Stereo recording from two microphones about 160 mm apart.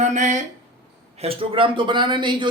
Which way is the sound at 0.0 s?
50° right (ahead or behind).